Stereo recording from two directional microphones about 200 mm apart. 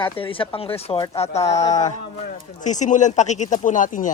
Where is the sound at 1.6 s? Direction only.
20° left (ahead or behind).